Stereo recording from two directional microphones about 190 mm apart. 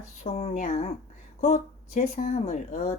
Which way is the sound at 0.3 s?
30° left (ahead or behind).